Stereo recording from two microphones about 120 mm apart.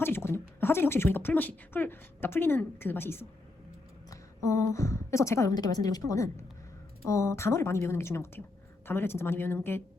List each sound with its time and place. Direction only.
0.0 s a woman's voice: 20° left (ahead or behind)